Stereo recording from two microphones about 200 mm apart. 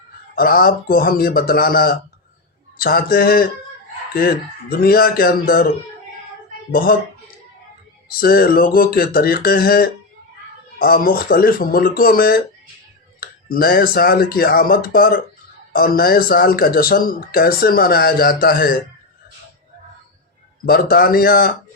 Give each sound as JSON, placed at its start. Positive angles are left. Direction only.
{"t": 0.3, "sound": "speech", "side_deg": 50}
{"t": 8.2, "sound": "speech", "side_deg": 50}
{"t": 20.7, "sound": "speech", "side_deg": 50}